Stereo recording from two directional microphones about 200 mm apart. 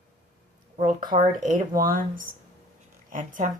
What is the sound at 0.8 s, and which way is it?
A woman's voice, 40° right (ahead or behind).